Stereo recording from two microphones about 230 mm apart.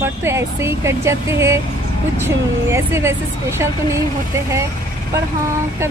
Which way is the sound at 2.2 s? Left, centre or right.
Centre.